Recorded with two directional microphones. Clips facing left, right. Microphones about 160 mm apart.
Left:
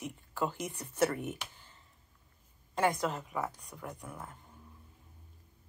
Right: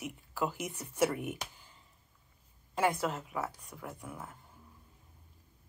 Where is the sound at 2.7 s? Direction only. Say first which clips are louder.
Even; 5° right (ahead or behind).